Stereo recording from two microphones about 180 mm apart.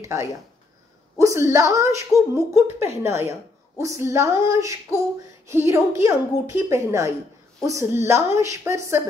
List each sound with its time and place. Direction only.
0.0 s a woman's voice: 15° right (ahead or behind)